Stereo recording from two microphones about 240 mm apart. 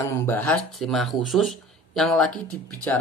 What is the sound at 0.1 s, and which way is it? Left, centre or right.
Speech, centre.